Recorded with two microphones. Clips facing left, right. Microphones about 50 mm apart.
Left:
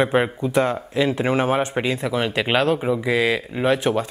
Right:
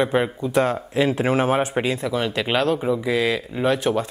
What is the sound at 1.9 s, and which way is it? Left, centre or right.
Speech, centre.